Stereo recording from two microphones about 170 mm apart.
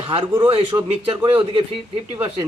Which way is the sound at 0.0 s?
30° right (ahead or behind).